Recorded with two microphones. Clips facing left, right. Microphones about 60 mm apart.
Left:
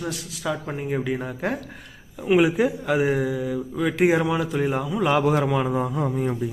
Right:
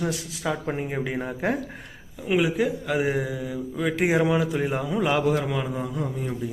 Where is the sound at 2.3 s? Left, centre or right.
Left.